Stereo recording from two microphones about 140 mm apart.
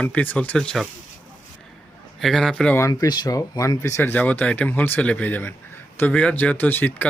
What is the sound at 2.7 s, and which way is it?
Speech, 25° left (ahead or behind).